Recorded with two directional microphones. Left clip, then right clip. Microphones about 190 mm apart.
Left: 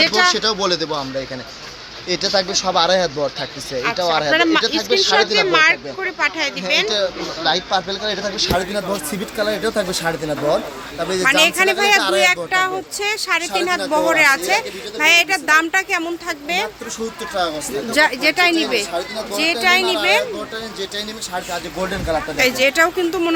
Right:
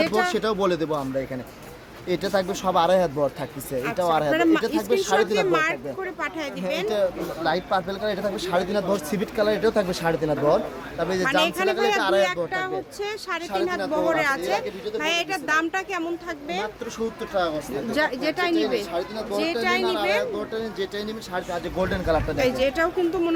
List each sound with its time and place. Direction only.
0.0 s speech: centre (ahead or behind)
0.3 s speech: 20° right (ahead or behind)
2.0 s speech: 10° right (ahead or behind)
11.2 s speech: 15° left (ahead or behind)
11.9 s speech: 5° right (ahead or behind)
12.2 s speech: 20° left (ahead or behind)
17.9 s speech: 20° left (ahead or behind)
19.8 s a woman's voice: 25° right (ahead or behind)
21.8 s speech: centre (ahead or behind); by 23.3 s 15° left (ahead or behind)